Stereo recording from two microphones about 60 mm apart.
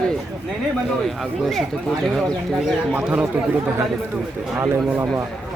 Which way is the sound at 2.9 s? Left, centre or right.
Right.